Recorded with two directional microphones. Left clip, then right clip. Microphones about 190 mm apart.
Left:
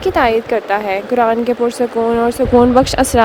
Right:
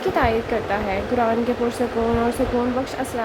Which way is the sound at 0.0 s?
55° left (ahead or behind).